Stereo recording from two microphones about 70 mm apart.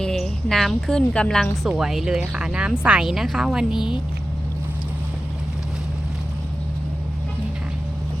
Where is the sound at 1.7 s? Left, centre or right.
Centre.